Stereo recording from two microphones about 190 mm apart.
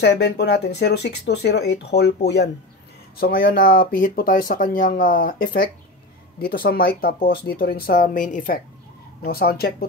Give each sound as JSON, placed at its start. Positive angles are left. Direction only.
{"t": 0.0, "sound": "speech", "side_deg": 60}
{"t": 3.2, "sound": "speech", "side_deg": 50}